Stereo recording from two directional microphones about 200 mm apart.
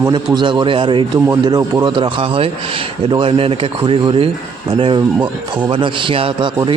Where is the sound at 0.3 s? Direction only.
25° right (ahead or behind).